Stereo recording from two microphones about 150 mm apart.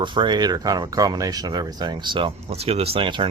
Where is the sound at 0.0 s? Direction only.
30° right (ahead or behind).